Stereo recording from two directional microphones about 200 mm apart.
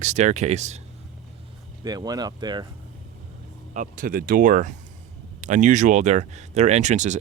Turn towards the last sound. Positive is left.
turn(degrees=-35)  # may be behind; listen again after turning